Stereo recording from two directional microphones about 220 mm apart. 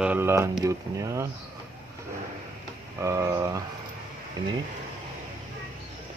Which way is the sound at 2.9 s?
15° right (ahead or behind).